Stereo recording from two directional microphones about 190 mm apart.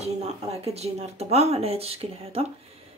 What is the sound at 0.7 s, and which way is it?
Speech, 35° right (ahead or behind).